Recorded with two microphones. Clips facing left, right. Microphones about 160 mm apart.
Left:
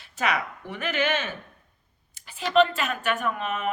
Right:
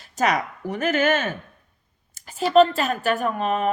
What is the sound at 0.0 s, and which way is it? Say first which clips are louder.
Speech: right 5 dB; 40° right (ahead or behind).